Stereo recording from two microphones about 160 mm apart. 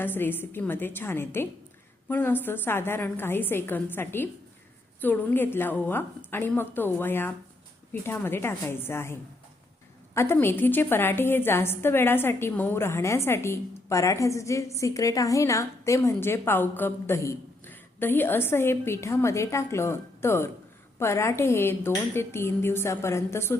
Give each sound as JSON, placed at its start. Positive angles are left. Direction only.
{"t": 0.0, "sound": "a woman's voice", "side_deg": 15}
{"t": 10.2, "sound": "a woman's voice", "side_deg": 15}